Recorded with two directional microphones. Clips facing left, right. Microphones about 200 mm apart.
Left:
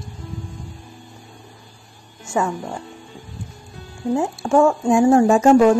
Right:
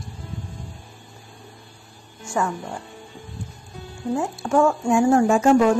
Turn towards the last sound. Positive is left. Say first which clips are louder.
# left 4 dB
turn(degrees=35)  # may be behind; listen again after turning